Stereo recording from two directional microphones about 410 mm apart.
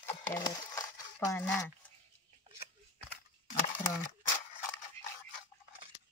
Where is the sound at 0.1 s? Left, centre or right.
Centre.